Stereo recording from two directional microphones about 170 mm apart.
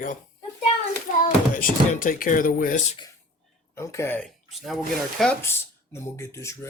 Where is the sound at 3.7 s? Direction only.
15° left (ahead or behind).